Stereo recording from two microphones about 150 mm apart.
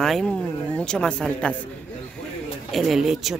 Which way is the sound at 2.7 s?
Centre (ahead or behind).